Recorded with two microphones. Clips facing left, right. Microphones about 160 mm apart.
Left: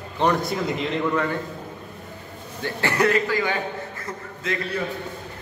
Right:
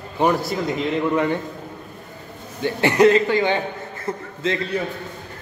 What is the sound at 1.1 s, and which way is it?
Speech, 20° right (ahead or behind).